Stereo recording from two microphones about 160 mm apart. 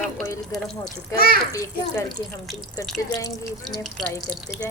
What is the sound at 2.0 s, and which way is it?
Speech, centre (ahead or behind).